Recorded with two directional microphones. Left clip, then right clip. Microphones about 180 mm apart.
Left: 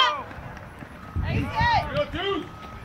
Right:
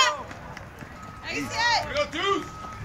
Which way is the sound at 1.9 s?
40° left (ahead or behind).